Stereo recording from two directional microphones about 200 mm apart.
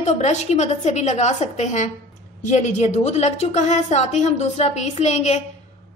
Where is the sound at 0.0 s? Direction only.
35° left (ahead or behind).